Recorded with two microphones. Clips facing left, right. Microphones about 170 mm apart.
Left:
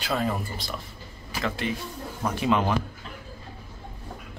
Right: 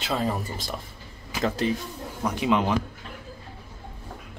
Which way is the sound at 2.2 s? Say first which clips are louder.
Right 1 dB; 15° right (ahead or behind).